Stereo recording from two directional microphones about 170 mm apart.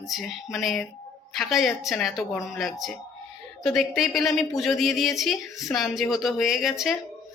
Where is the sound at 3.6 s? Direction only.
Centre (ahead or behind).